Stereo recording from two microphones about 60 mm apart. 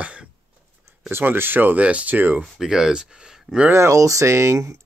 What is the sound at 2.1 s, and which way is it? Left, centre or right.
Speech, right.